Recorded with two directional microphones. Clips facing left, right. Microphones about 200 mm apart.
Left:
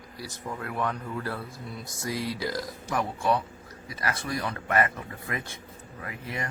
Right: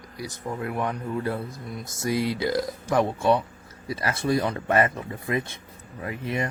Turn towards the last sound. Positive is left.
turn(degrees=-25)  # may be behind; listen again after turning